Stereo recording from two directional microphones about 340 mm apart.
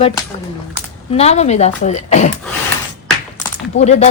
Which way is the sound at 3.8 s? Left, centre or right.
Centre.